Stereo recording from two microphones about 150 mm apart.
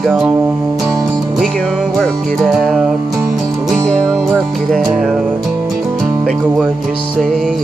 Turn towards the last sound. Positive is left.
turn(degrees=0)  # may be behind; listen again after turning